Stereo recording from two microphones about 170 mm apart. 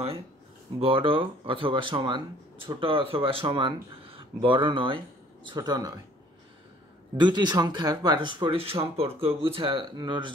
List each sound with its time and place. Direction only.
0.7 s speech: 30° right (ahead or behind)
7.2 s speech: 25° right (ahead or behind)